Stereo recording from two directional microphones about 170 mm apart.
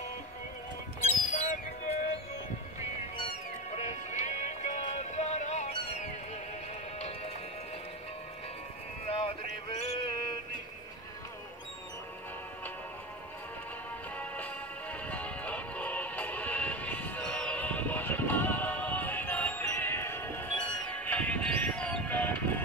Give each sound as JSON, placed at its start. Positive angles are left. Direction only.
{"t": 1.0, "sound": "music", "side_deg": 40}
{"t": 3.2, "sound": "music", "side_deg": 35}
{"t": 9.0, "sound": "a sound", "side_deg": 35}
{"t": 14.1, "sound": "music", "side_deg": 10}